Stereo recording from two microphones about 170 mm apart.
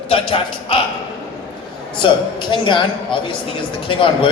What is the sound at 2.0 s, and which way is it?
A man's voice, 30° left (ahead or behind).